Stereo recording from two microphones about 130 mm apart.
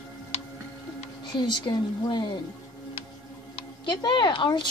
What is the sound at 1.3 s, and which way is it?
Speech, 35° left (ahead or behind).